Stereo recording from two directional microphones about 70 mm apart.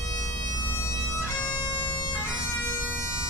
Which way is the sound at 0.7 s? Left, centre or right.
Left.